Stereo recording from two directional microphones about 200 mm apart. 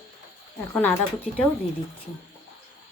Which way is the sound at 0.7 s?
10° left (ahead or behind).